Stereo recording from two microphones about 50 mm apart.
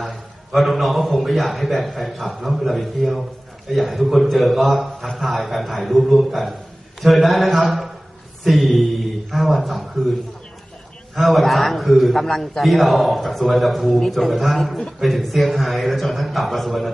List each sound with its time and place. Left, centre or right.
0.0 s a man's voice: centre
11.1 s a man's voice: centre